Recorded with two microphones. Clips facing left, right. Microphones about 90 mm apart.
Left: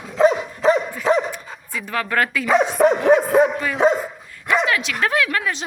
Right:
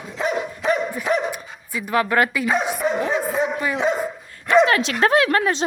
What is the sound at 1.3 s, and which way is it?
Dog, 15° right (ahead or behind).